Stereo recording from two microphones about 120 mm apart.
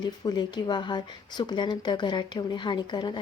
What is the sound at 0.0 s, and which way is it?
Speech, 35° left (ahead or behind).